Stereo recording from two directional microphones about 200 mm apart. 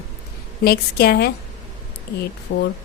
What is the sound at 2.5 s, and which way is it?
Speech, 60° left (ahead or behind).